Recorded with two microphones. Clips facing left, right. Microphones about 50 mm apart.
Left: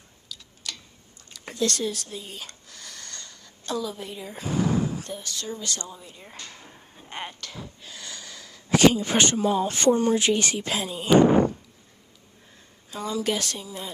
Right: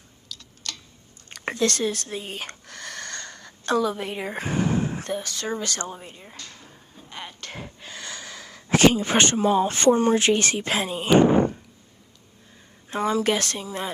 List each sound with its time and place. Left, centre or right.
0.3 s tick-tock: centre
1.3 s speech: right
6.3 s drawer open or close: centre
6.9 s a sound: left
7.4 s speech: right
12.9 s speech: right